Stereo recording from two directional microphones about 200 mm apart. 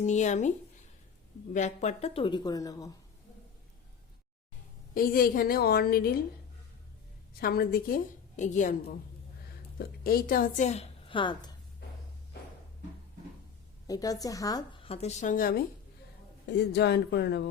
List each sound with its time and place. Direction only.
0.0 s speech: 35° left (ahead or behind)
1.5 s a woman's voice: 35° left (ahead or behind); by 2.9 s 15° left (ahead or behind)
4.9 s a woman's voice: 45° left (ahead or behind)
7.3 s a woman's voice: 50° left (ahead or behind); by 11.5 s 25° left (ahead or behind)
13.8 s a woman's voice: 20° left (ahead or behind); by 15.6 s 45° left (ahead or behind)
16.5 s speech: 55° left (ahead or behind)